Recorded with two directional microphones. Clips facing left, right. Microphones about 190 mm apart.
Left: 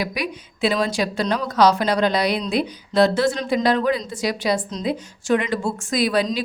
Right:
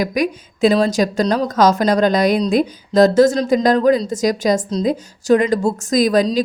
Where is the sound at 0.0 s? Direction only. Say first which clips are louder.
Right 7 dB; 45° right (ahead or behind).